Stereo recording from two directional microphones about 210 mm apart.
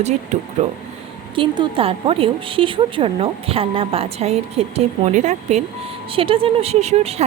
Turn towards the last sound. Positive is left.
turn(degrees=-30)  # may be behind; listen again after turning